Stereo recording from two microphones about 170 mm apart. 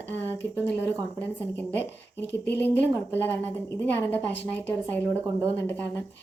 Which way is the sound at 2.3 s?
85° left.